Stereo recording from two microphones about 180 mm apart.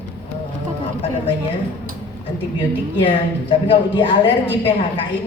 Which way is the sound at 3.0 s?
30° left (ahead or behind).